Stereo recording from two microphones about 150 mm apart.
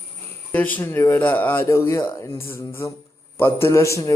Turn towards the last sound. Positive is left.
turn(degrees=20)  # may be behind; listen again after turning